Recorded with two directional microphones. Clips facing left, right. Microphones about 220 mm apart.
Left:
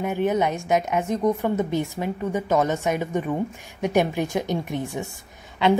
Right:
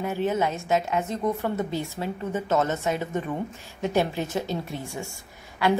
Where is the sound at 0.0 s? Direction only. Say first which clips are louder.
Left 3 dB; 15° left (ahead or behind).